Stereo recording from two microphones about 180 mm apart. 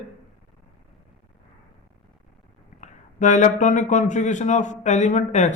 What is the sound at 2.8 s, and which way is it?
Speech, 45° left (ahead or behind).